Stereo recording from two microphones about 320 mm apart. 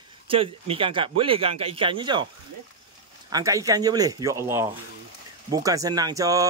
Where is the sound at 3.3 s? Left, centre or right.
Centre.